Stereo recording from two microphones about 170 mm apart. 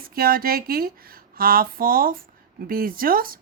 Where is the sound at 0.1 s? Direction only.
60° right (ahead or behind).